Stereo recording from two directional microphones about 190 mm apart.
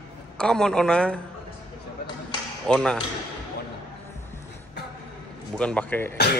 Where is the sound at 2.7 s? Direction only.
5° left (ahead or behind).